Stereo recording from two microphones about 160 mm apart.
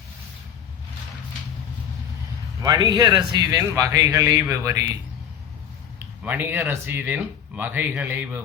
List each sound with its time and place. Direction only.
2.6 s speech: 25° right (ahead or behind)
6.2 s speech: 10° right (ahead or behind)